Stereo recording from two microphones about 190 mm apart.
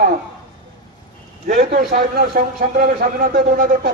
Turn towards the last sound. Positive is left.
turn(degrees=-45)  # may be behind; listen again after turning